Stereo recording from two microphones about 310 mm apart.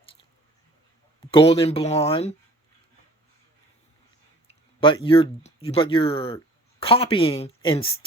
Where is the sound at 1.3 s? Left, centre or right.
Centre.